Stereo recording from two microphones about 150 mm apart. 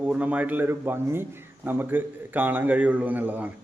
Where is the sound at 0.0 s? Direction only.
10° right (ahead or behind).